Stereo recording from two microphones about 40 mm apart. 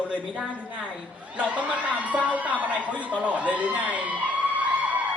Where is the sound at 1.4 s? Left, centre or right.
Right.